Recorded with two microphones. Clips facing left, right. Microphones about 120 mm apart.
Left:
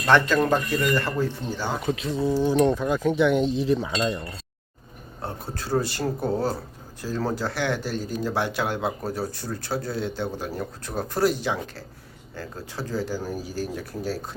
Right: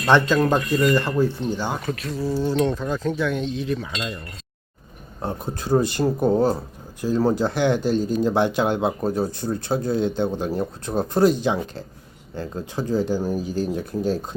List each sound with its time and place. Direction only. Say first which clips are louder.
0.0 s speech: right 2 dB; 15° right (ahead or behind)
2.0 s speech: left 1 dB; 25° left (ahead or behind)
5.2 s speech: right 5 dB; 20° right (ahead or behind)